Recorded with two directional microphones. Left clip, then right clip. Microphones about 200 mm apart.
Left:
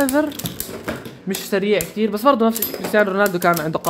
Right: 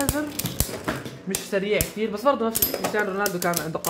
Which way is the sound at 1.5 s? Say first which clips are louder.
Left 5 dB; 55° left (ahead or behind).